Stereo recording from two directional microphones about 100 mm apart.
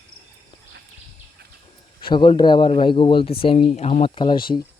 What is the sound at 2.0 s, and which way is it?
Speech, 55° left (ahead or behind).